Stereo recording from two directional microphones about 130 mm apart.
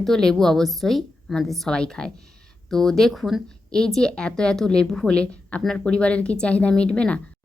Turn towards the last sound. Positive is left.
turn(degrees=10)  # may be behind; listen again after turning